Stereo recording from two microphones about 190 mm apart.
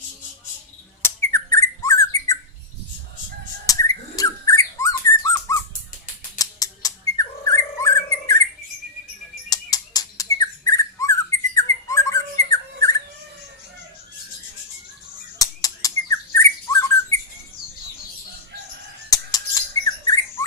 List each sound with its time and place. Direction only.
1.0 s squawk: 15° left (ahead or behind)
3.7 s bird: 15° left (ahead or behind)
6.4 s a sound: 20° left (ahead or behind)
9.5 s bird: 20° left (ahead or behind)
12.5 s a sound: 15° left (ahead or behind)
15.4 s bird: 20° left (ahead or behind)
19.1 s bird: 20° left (ahead or behind)